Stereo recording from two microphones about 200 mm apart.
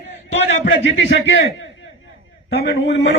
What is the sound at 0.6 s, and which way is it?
Speech, 70° left (ahead or behind).